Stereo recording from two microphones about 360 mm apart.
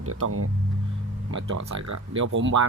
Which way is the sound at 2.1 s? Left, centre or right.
Right.